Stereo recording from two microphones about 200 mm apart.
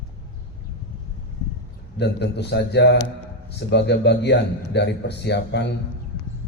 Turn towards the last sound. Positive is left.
turn(degrees=60)  # may be behind; listen again after turning